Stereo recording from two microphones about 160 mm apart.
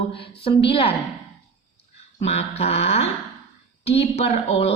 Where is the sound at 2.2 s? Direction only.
40° left (ahead or behind).